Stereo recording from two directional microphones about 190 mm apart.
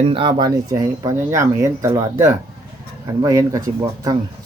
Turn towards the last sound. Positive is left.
turn(degrees=-20)  # may be behind; listen again after turning